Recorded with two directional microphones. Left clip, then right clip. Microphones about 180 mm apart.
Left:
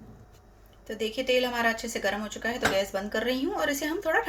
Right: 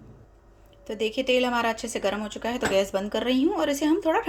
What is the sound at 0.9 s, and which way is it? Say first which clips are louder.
Speech: right 3 dB; 30° right (ahead or behind).